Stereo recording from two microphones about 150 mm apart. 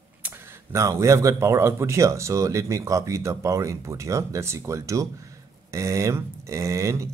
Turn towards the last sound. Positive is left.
turn(degrees=-20)  # may be behind; listen again after turning